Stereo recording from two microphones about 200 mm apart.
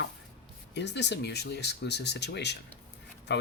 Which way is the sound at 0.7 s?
60° left (ahead or behind).